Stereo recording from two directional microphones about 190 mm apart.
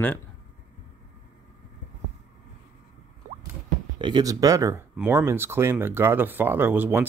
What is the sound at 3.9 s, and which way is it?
Speech, 25° right (ahead or behind).